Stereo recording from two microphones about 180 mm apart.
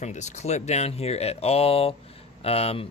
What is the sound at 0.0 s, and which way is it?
Speech, 40° left (ahead or behind).